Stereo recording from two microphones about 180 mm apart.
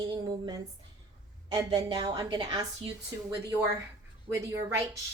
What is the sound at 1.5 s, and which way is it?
A woman's voice, 20° right (ahead or behind).